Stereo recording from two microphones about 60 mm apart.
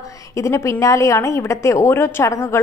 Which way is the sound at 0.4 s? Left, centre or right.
Left.